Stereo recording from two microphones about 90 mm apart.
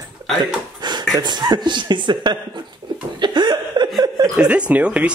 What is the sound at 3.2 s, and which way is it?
Chuckle, 55° right (ahead or behind).